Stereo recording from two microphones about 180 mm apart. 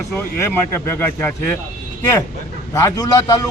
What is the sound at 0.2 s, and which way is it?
A man's voice, 15° left (ahead or behind).